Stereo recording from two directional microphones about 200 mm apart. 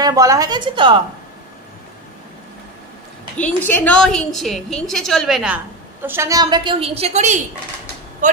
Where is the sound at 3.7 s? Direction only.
5° left (ahead or behind).